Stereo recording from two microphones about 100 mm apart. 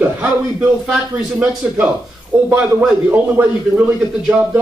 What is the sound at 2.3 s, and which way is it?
Speech, 20° right (ahead or behind).